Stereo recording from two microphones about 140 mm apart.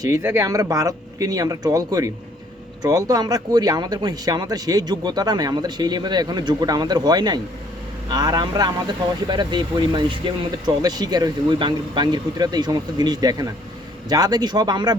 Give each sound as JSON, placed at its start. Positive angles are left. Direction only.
{"t": 0.0, "sound": "speech", "side_deg": -20}